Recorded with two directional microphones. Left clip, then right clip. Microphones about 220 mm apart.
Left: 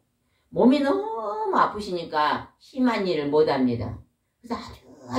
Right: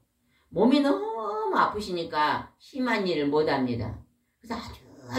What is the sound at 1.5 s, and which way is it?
Speech, 30° right (ahead or behind).